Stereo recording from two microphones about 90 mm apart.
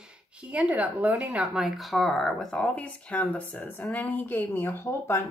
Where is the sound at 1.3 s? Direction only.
5° right (ahead or behind).